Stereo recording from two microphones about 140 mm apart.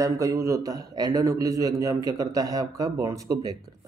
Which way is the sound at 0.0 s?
25° right (ahead or behind).